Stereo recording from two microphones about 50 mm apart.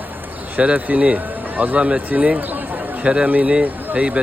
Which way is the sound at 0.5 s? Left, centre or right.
Right.